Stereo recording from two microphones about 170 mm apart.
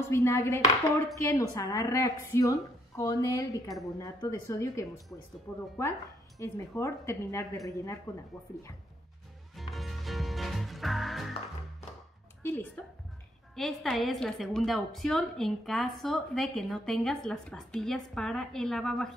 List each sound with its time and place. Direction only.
0.1 s a woman's voice: 15° left (ahead or behind)
9.6 s music: centre (ahead or behind)
12.4 s a woman's voice: 10° left (ahead or behind)